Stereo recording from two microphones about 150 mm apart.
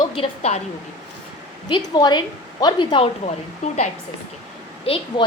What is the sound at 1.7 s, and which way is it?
A woman's voice, 30° left (ahead or behind).